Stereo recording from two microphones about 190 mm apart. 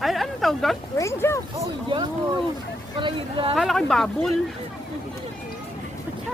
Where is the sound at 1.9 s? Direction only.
25° right (ahead or behind).